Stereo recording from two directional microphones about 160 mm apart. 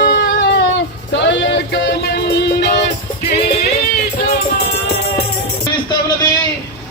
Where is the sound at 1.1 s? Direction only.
90° left.